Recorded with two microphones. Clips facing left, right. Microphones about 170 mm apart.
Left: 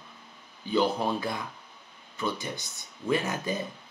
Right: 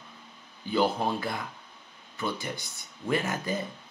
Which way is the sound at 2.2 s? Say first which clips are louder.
Left 1 dB; 20° left (ahead or behind).